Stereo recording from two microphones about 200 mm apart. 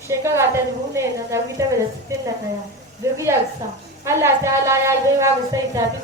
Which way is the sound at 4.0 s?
15° right (ahead or behind).